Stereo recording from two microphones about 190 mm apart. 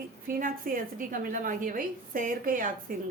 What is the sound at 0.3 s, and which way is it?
Speech, 50° right (ahead or behind).